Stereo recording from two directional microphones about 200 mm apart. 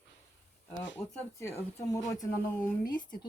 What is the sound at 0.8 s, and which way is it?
Speech, 15° left (ahead or behind).